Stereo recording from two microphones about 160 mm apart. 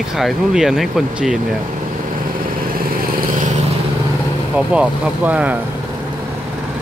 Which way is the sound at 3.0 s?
55° right (ahead or behind).